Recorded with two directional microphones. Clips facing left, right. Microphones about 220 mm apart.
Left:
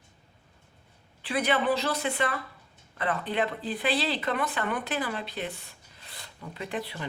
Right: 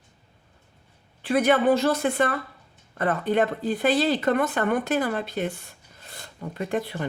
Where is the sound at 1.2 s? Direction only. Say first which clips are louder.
Right 7 dB; 45° right (ahead or behind).